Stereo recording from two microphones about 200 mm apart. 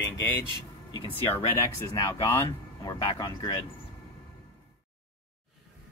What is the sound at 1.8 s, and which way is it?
Speech, 15° left (ahead or behind).